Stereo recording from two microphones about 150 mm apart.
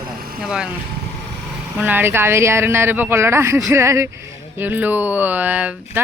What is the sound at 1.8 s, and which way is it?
Speech, 10° right (ahead or behind).